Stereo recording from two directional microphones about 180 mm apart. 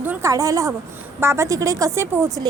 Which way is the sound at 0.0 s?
15° right (ahead or behind).